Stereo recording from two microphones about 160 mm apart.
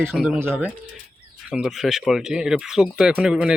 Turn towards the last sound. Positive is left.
turn(degrees=-5)  # may be behind; listen again after turning